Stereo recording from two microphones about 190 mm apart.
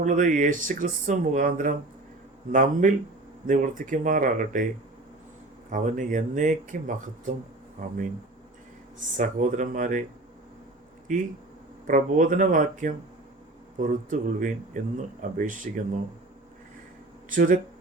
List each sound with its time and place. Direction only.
0.0 s speech: 45° right (ahead or behind)
5.7 s speech: 40° right (ahead or behind)
9.0 s speech: 45° right (ahead or behind)
11.1 s speech: 45° right (ahead or behind)
17.2 s speech: 45° right (ahead or behind)